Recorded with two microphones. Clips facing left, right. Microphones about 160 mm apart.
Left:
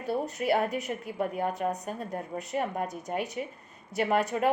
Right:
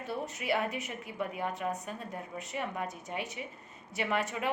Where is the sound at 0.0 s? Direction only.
40° left (ahead or behind).